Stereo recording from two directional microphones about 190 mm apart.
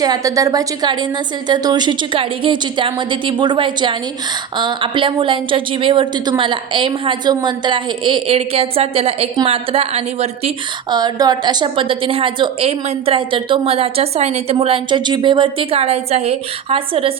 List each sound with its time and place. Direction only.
0.0 s a woman's voice: 20° right (ahead or behind)
10.9 s a woman's voice: 20° right (ahead or behind)